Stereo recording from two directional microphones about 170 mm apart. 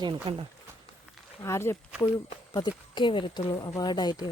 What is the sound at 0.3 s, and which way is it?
Speech, 30° right (ahead or behind).